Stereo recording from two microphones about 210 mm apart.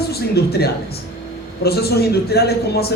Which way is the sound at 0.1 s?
50° left (ahead or behind).